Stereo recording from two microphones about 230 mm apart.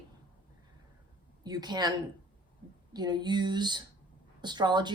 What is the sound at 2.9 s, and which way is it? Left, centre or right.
A woman's voice, centre.